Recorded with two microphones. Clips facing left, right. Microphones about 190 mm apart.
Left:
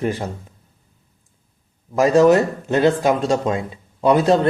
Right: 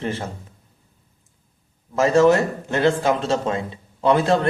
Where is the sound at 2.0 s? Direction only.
15° left (ahead or behind).